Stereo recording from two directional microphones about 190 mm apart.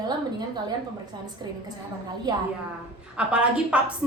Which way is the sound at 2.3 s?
20° right (ahead or behind).